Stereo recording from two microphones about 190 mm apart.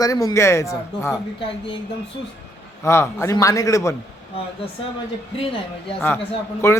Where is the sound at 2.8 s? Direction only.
15° left (ahead or behind).